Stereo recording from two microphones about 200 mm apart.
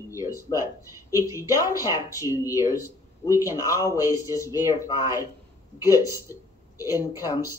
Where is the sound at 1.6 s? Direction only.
15° left (ahead or behind).